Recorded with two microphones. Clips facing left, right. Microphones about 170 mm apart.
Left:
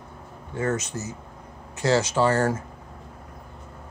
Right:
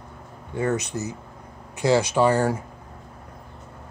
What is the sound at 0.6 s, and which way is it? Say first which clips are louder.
Speech: right 2 dB; 15° right (ahead or behind).